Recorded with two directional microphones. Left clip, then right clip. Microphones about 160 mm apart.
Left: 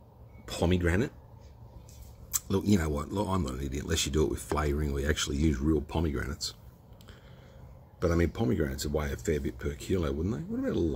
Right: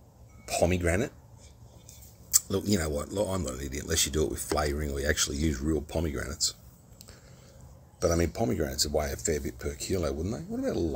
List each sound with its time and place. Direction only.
0.5 s speech: 55° left (ahead or behind)
2.3 s speech: 55° left (ahead or behind)
8.0 s speech: 50° left (ahead or behind)